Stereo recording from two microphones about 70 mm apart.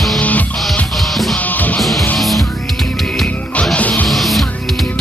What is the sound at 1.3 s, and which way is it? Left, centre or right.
Music, left.